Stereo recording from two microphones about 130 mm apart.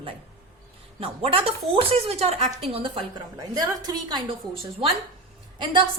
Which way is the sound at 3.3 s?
30° right (ahead or behind).